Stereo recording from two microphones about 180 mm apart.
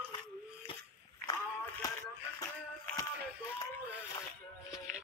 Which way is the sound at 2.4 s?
15° left (ahead or behind).